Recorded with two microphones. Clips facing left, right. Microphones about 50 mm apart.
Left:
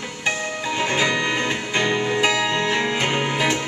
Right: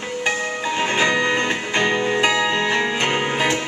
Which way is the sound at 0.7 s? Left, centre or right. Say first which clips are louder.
Right 2 dB; centre.